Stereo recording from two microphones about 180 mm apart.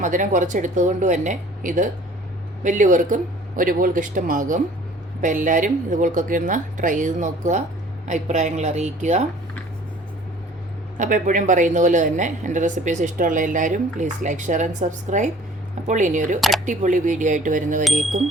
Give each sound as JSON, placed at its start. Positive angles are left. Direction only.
{"t": 0.0, "sound": "a woman's voice", "side_deg": -45}
{"t": 10.9, "sound": "a woman's voice", "side_deg": -45}